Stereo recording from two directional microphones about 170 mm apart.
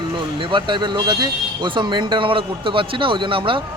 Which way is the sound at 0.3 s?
30° right (ahead or behind).